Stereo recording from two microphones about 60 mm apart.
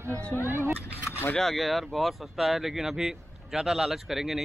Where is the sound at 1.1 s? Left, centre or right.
Left.